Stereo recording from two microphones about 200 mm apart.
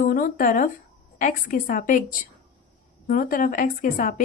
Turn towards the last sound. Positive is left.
turn(degrees=40)  # may be behind; listen again after turning